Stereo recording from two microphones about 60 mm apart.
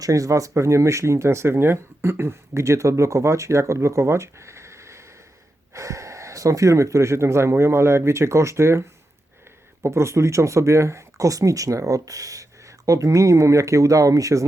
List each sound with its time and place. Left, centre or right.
0.0 s speech: right